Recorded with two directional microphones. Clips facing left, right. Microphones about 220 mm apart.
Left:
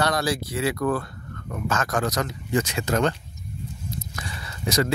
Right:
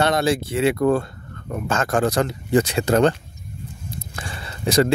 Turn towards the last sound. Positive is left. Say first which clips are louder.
# right 6 dB
turn(degrees=-30)  # may be behind; listen again after turning